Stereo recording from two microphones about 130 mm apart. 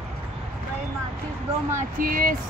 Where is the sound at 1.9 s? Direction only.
90° right.